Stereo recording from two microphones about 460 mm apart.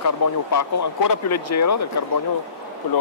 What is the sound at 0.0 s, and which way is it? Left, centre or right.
Speech, left.